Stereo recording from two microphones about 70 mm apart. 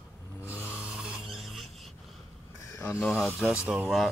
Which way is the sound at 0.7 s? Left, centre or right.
Centre.